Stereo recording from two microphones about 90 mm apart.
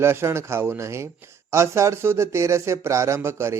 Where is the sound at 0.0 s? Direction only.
30° right (ahead or behind).